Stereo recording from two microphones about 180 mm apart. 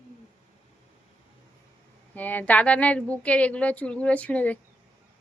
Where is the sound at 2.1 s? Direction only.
10° left (ahead or behind).